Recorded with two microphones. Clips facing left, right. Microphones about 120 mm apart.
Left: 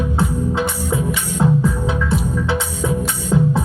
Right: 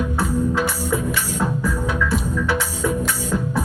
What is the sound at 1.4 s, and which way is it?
Music, 25° left (ahead or behind).